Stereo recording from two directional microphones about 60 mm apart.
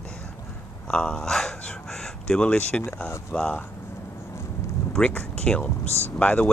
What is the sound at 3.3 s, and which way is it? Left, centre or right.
Speech, left.